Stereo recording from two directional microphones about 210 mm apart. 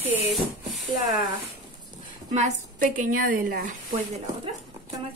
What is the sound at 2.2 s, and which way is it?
Speech, 35° right (ahead or behind).